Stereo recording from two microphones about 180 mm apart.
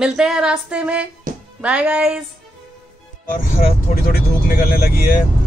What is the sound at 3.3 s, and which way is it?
Speech, 55° left (ahead or behind).